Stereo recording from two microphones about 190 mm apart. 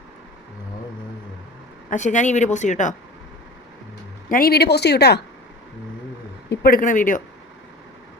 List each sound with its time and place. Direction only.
1.9 s a woman's voice: 40° left (ahead or behind)
4.3 s speech: 50° left (ahead or behind)
6.5 s speech: 50° left (ahead or behind)